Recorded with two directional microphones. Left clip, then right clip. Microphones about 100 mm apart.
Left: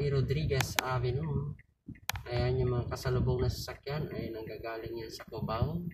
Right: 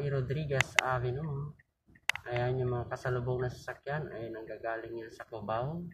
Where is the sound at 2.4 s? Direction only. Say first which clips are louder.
Left 1 dB; 15° left (ahead or behind).